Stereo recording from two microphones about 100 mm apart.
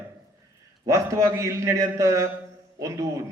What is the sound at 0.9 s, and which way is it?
A man's voice, 30° right (ahead or behind).